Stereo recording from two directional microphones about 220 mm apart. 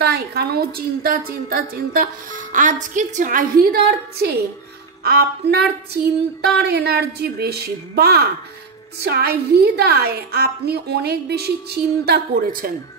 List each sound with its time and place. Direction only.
0.0 s a woman's voice: 45° right (ahead or behind)